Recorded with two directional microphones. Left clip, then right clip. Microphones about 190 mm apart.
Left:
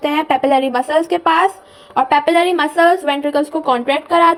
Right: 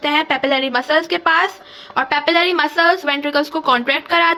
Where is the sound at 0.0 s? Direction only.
15° left (ahead or behind).